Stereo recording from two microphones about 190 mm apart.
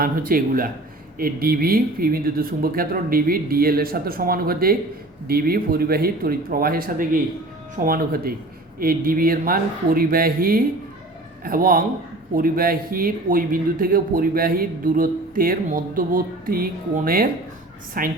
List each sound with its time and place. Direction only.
0.0 s speech: 50° right (ahead or behind)